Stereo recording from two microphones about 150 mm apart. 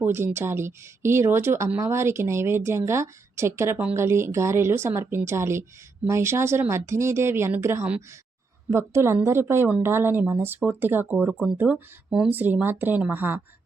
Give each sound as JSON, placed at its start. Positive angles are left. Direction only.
{"t": 0.0, "sound": "speech", "side_deg": -15}